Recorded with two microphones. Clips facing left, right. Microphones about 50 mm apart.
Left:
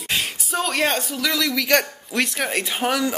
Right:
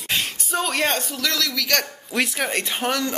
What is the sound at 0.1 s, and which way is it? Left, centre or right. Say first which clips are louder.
Speech: even; centre.